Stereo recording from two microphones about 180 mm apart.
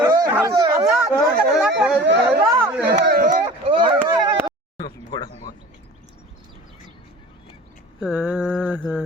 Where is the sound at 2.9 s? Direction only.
45° right (ahead or behind).